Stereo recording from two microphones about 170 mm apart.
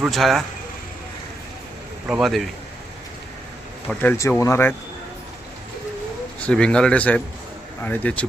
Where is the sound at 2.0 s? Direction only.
5° right (ahead or behind).